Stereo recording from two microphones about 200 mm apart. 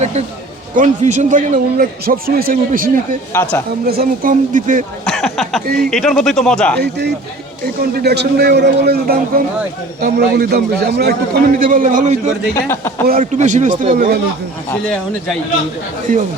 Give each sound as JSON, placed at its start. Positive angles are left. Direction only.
{"t": 0.0, "sound": "a man's voice", "side_deg": -35}
{"t": 5.0, "sound": "speech", "side_deg": 0}
{"t": 5.6, "sound": "a man's voice", "side_deg": -50}
{"t": 5.9, "sound": "speech", "side_deg": 0}
{"t": 6.7, "sound": "a man's voice", "side_deg": -55}
{"t": 12.5, "sound": "speech", "side_deg": 10}
{"t": 13.1, "sound": "speech", "side_deg": -40}
{"t": 16.1, "sound": "speech", "side_deg": -40}